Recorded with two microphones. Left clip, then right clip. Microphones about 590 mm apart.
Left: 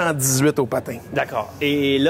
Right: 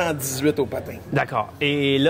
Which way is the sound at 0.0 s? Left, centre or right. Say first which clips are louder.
Left 3 dB; left.